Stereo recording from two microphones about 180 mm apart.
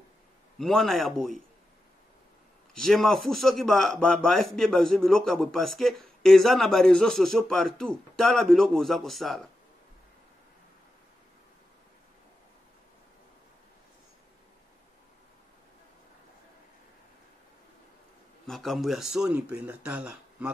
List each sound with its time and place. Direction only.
0.6 s speech: centre (ahead or behind)
2.7 s speech: centre (ahead or behind)
18.5 s speech: centre (ahead or behind)